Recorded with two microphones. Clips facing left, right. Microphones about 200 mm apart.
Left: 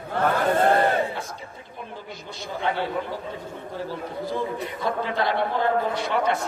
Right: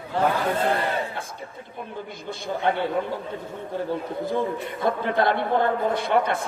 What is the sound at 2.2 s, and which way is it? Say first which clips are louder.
Speech: right 3 dB; 55° right (ahead or behind).